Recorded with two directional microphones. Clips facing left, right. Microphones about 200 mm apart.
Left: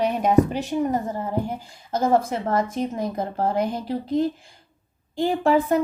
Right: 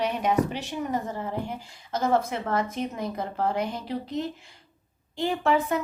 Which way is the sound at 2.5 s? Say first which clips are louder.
Left 4 dB; 45° left (ahead or behind).